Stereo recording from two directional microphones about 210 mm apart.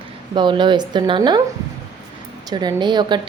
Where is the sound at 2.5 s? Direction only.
20° right (ahead or behind).